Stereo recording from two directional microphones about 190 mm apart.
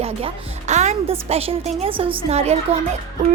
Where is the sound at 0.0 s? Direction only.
30° right (ahead or behind).